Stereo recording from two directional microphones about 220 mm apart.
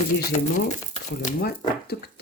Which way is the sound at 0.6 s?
35° left (ahead or behind).